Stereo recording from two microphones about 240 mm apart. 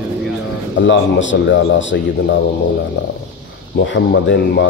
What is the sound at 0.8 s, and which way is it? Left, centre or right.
A man's voice, left.